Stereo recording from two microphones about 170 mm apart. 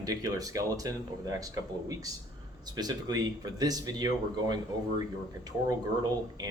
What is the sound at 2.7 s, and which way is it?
Speech, 25° right (ahead or behind).